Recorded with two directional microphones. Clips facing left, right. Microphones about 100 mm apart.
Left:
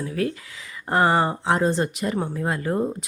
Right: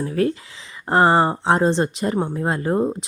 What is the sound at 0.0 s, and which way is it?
Speech, 35° right (ahead or behind).